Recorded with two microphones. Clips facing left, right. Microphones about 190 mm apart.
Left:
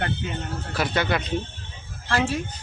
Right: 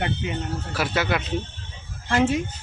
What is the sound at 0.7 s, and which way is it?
Speech, 5° right (ahead or behind).